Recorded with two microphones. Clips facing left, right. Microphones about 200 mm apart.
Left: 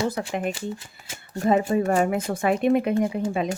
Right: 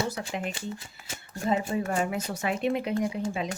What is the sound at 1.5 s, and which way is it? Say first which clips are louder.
Speech: left 7 dB; 55° left (ahead or behind).